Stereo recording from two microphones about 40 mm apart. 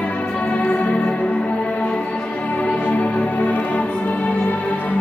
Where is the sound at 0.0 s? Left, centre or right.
Left.